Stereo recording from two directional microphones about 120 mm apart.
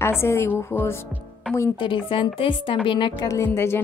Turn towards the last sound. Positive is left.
turn(degrees=20)  # may be behind; listen again after turning